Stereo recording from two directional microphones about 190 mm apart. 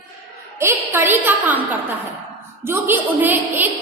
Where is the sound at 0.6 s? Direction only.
10° right (ahead or behind).